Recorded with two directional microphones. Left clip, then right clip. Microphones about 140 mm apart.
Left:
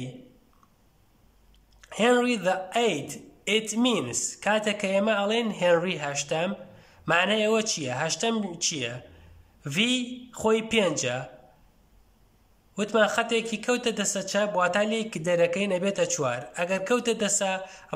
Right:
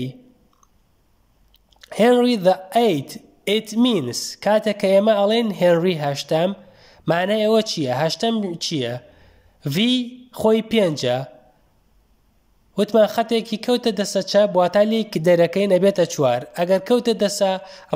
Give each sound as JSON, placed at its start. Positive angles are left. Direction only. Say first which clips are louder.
{"t": 1.7, "sound": "a man's voice", "louder": "right 7 dB", "side_deg": -35}
{"t": 12.7, "sound": "a man's voice", "louder": "right 7 dB", "side_deg": -35}